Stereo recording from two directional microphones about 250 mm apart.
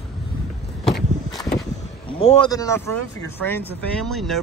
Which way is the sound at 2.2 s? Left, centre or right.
Left.